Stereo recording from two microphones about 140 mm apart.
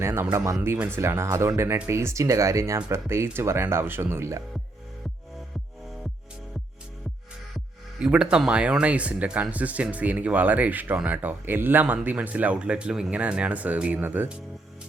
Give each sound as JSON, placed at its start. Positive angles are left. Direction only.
{"t": 0.0, "sound": "speech", "side_deg": -20}
{"t": 7.9, "sound": "speech", "side_deg": -5}